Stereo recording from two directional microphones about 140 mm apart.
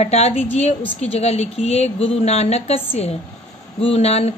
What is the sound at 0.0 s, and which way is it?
Speech, 50° left (ahead or behind).